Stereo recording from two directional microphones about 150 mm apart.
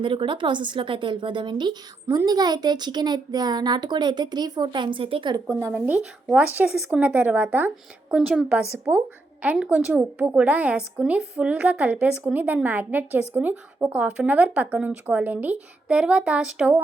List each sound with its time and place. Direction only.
0.0 s a woman's voice: 35° right (ahead or behind)
5.5 s a woman's voice: 20° right (ahead or behind)